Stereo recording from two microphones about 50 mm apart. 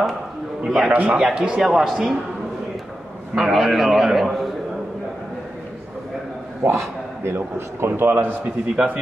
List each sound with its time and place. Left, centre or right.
0.7 s speech: centre
0.9 s a man's voice: right
1.2 s speech: right
1.6 s speech: centre
3.3 s a man's voice: centre
6.6 s a man's voice: right
8.7 s speech: right